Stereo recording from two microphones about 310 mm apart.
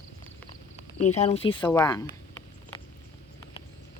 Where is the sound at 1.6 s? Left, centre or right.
Centre.